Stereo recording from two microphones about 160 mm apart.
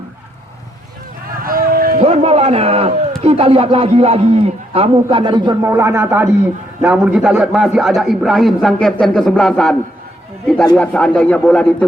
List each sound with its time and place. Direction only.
1.5 s a sound: 65° right (ahead or behind)
2.0 s a man's voice: 40° right (ahead or behind)
5.6 s a man's voice: 15° right (ahead or behind); by 11.9 s 5° left (ahead or behind)